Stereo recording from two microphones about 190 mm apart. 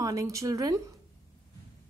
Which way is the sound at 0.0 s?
15° right (ahead or behind).